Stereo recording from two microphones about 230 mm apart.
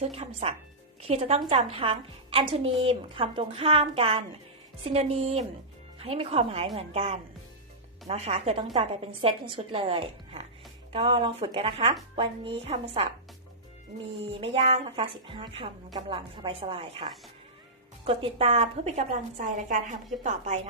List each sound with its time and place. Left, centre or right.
0.0 s a woman's voice: right
14.2 s a woman's voice: right